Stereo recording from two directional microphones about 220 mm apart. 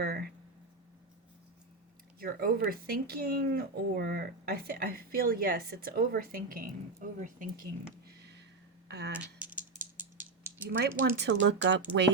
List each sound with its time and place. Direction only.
0.0 s speech: 45° right (ahead or behind)
2.1 s speech: 45° right (ahead or behind)
9.4 s rattle: 5° right (ahead or behind)
10.0 s mechanisms: 10° right (ahead or behind)
10.8 s speech: 50° right (ahead or behind)